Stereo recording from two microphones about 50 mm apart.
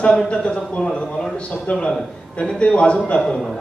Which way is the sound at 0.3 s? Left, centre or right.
Left.